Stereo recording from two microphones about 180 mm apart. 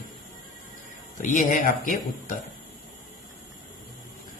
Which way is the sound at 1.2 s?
45° left (ahead or behind).